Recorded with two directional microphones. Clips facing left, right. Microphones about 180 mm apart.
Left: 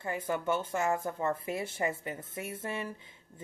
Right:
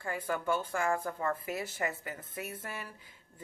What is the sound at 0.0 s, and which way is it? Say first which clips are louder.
Speech: left 2 dB; 20° left (ahead or behind).